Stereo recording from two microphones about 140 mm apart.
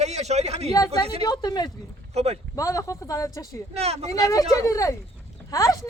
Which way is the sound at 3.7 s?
50° right (ahead or behind).